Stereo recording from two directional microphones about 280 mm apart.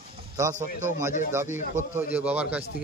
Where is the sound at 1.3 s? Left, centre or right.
Centre.